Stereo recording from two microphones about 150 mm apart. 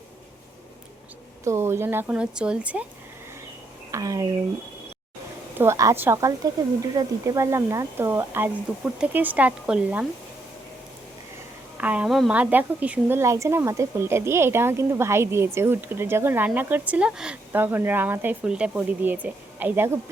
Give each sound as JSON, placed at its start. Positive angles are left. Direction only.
{"t": 1.5, "sound": "speech", "side_deg": -15}
{"t": 3.9, "sound": "speech", "side_deg": -25}
{"t": 5.5, "sound": "speech", "side_deg": -20}
{"t": 11.8, "sound": "speech", "side_deg": -10}